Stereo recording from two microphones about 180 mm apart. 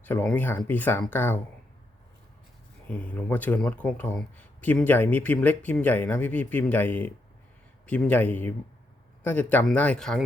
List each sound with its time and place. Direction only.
0.0 s speech: 10° left (ahead or behind)
2.9 s speech: 5° left (ahead or behind)